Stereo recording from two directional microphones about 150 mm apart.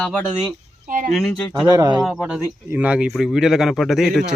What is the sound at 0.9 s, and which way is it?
Speech, 65° right (ahead or behind).